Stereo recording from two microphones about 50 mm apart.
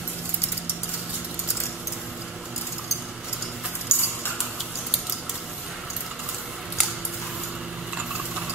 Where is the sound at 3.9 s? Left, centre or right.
Left.